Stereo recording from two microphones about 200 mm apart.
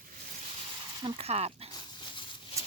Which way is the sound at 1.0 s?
30° right (ahead or behind).